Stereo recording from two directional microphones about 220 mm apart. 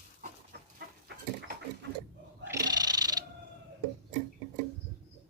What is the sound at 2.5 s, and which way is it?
Cat, 15° right (ahead or behind).